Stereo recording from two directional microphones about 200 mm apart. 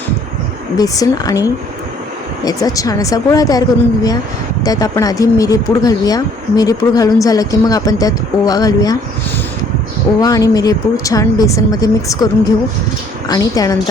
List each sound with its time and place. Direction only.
0.8 s speech: 20° left (ahead or behind)
4.6 s speech: 20° left (ahead or behind)
10.2 s speech: 20° left (ahead or behind)